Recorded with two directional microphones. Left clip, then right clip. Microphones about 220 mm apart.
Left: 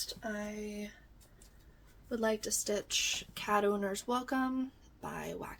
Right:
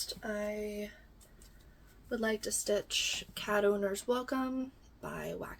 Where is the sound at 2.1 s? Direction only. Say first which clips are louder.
Left 1 dB; 15° left (ahead or behind).